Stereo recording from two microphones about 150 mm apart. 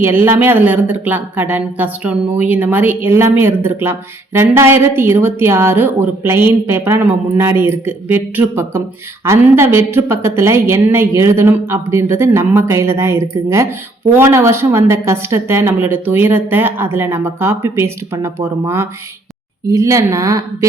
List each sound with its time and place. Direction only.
0.0 s a woman's voice: 15° right (ahead or behind)